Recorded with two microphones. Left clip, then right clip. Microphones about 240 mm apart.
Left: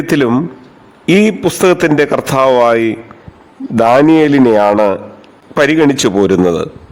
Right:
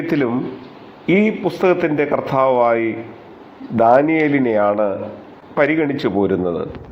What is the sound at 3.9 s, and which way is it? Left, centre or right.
A man's voice, left.